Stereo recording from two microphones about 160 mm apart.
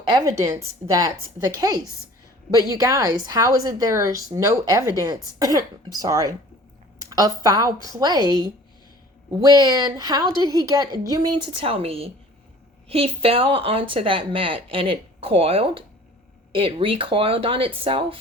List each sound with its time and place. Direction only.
0.1 s a woman's voice: 25° right (ahead or behind)